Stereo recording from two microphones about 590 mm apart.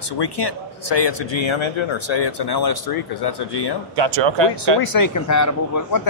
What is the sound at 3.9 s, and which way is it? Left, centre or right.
Speech, right.